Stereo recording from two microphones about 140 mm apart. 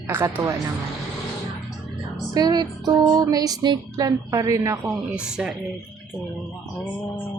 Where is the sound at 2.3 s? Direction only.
30° right (ahead or behind).